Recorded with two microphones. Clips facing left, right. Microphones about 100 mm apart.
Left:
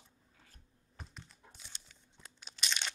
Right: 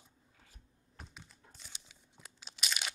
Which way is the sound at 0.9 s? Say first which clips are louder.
Left 1 dB; centre (ahead or behind).